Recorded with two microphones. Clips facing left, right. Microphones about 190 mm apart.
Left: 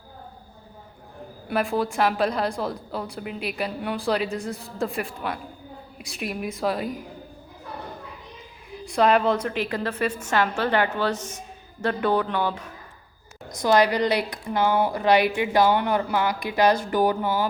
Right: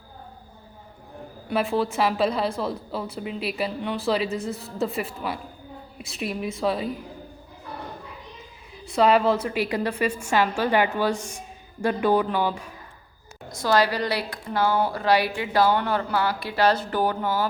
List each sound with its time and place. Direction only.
1.5 s a woman's voice: centre (ahead or behind)
8.8 s a woman's voice: centre (ahead or behind)
13.5 s speech: 20° left (ahead or behind)